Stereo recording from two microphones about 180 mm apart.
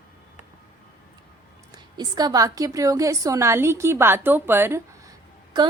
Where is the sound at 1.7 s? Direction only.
25° right (ahead or behind).